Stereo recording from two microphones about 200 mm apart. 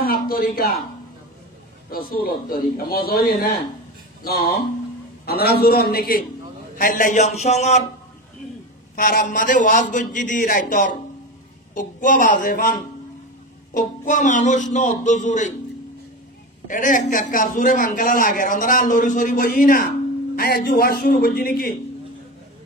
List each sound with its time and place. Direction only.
0.0 s a sound: 45° left (ahead or behind)
1.9 s a man's voice: 45° left (ahead or behind)
5.2 s a man's voice: 50° left (ahead or behind); by 7.8 s 35° left (ahead or behind)
8.9 s a man's voice: 45° left (ahead or behind)
13.7 s a man's voice: 40° left (ahead or behind)
16.6 s a man's voice: 40° left (ahead or behind)